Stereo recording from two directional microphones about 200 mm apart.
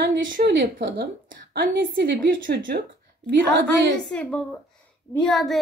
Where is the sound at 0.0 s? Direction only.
50° right (ahead or behind).